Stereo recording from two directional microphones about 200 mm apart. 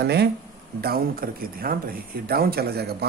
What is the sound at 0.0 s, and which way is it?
Speech, 55° right (ahead or behind).